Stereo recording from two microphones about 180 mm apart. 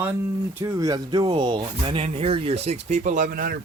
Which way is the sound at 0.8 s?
20° right (ahead or behind).